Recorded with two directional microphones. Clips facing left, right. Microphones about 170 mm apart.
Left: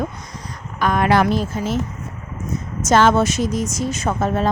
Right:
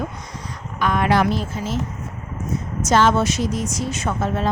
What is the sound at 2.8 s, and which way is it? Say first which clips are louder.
A woman's voice: left 2 dB; 50° left (ahead or behind).